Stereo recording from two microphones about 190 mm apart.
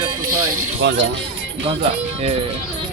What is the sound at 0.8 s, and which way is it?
Speech, 70° right (ahead or behind).